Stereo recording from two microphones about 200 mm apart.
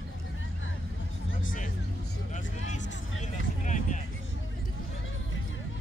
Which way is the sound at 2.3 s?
35° left (ahead or behind).